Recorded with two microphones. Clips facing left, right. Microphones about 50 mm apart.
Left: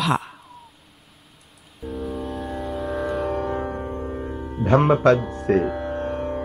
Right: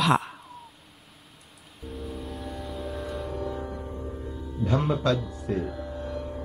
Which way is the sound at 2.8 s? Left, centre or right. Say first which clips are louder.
Left 10 dB; left.